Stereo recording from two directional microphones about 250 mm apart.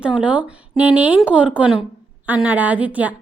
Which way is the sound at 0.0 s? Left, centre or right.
Centre.